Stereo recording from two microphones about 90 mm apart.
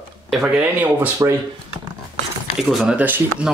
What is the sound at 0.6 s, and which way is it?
Speech, 20° right (ahead or behind).